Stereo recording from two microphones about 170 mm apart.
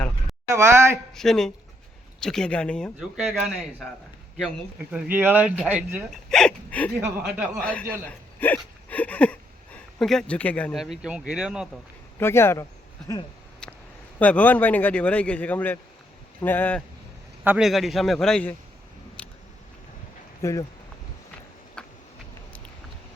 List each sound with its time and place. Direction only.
0.4 s speech: 15° right (ahead or behind)
1.1 s speech: centre (ahead or behind)
6.2 s a sound: 5° left (ahead or behind)
6.9 s speech: 10° right (ahead or behind)
7.6 s a man's voice: 10° left (ahead or behind)
8.5 s a sound: 10° left (ahead or behind)
10.0 s speech: 5° left (ahead or behind)
12.2 s a man's voice: 15° left (ahead or behind)
14.2 s a man's voice: 10° left (ahead or behind)
17.4 s a man's voice: 10° right (ahead or behind)
19.2 s a sound: 5° left (ahead or behind)
20.4 s a man's voice: 15° left (ahead or behind)
21.8 s a sound: 5° left (ahead or behind)